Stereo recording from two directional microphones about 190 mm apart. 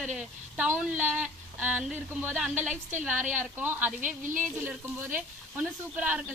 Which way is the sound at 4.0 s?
40° right (ahead or behind).